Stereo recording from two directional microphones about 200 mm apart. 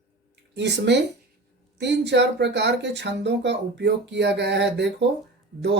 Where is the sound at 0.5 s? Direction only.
60° right (ahead or behind).